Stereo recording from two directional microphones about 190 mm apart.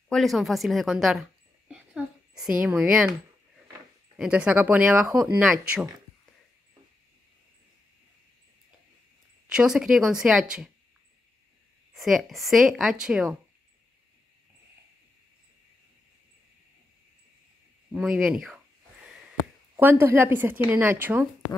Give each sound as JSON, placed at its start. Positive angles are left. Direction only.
{"t": 0.1, "sound": "speech", "side_deg": 0}
{"t": 1.7, "sound": "a sound", "side_deg": -5}
{"t": 2.6, "sound": "speech", "side_deg": -5}
{"t": 4.2, "sound": "speech", "side_deg": -5}
{"t": 9.5, "sound": "speech", "side_deg": -5}
{"t": 11.9, "sound": "speech", "side_deg": 0}
{"t": 17.9, "sound": "speech", "side_deg": -5}
{"t": 19.8, "sound": "speech", "side_deg": -10}